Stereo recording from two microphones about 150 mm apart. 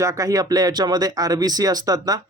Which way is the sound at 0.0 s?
20° right (ahead or behind).